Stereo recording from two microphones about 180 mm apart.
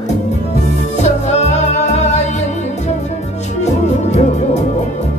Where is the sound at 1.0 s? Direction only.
40° left (ahead or behind).